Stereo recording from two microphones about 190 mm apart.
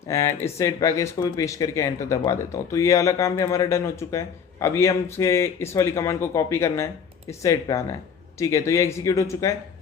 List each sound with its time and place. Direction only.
0.1 s speech: 15° left (ahead or behind)